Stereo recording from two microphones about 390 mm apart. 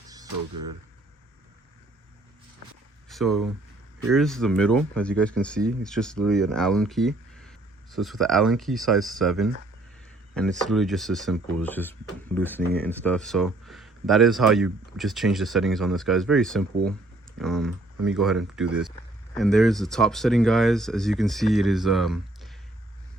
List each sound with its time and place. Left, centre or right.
0.3 s speech: right
3.1 s speech: centre
10.7 s speech: centre